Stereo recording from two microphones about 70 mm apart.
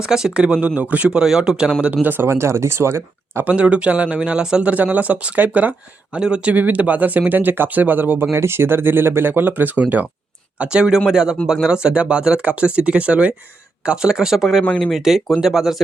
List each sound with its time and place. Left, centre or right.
0.0 s speech: centre
1.8 s speech: right
3.4 s speech: centre
4.7 s speech: right
8.3 s speech: right
10.6 s speech: centre